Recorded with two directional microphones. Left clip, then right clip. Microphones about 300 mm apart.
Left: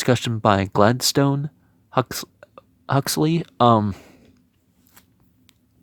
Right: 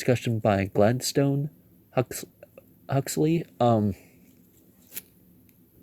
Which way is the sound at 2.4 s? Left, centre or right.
Left.